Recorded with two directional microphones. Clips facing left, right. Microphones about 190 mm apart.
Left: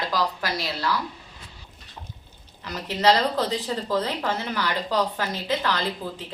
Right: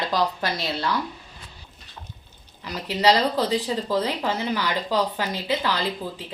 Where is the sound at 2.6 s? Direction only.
10° right (ahead or behind).